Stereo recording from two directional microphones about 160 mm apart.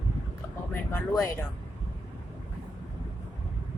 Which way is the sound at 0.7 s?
15° left (ahead or behind).